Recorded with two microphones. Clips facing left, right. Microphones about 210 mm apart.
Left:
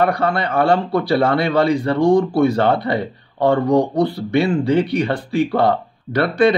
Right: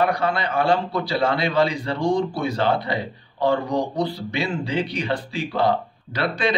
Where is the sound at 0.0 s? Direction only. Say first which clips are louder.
Left 4 dB; 55° left (ahead or behind).